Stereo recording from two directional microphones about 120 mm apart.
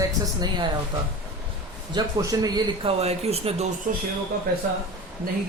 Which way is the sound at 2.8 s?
60° right (ahead or behind).